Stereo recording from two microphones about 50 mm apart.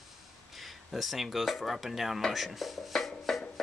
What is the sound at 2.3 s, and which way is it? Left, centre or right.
Chopping, centre.